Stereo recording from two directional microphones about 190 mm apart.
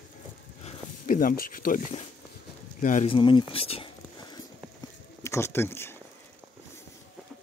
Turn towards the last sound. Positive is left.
turn(degrees=15)  # may be behind; listen again after turning